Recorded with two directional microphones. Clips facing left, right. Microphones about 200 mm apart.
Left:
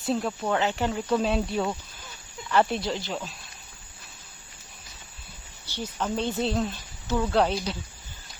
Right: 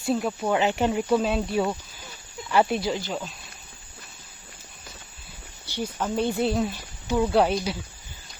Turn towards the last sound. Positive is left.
turn(degrees=-10)  # may be behind; listen again after turning